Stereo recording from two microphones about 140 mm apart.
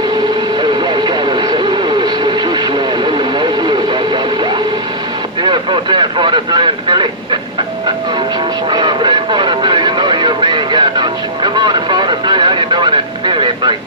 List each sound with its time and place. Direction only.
0.6 s vehicle: 30° right (ahead or behind)
8.6 s vehicle: 30° right (ahead or behind)